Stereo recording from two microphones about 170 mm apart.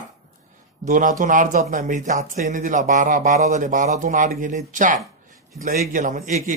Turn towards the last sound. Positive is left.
turn(degrees=-50)  # may be behind; listen again after turning